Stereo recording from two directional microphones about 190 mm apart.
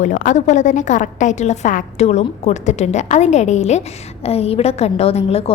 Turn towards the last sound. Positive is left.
turn(degrees=30)  # may be behind; listen again after turning